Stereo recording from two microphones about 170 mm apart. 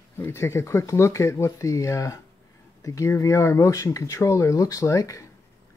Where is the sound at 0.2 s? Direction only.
15° left (ahead or behind).